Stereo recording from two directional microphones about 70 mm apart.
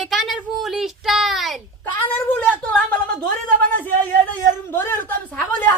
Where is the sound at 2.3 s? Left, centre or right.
Left.